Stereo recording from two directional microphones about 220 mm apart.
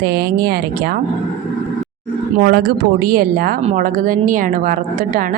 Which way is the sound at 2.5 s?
45° right (ahead or behind).